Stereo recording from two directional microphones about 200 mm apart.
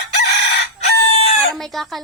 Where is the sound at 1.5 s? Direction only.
Centre (ahead or behind).